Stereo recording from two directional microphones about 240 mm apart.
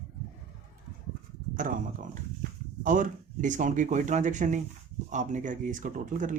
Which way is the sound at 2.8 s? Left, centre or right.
Right.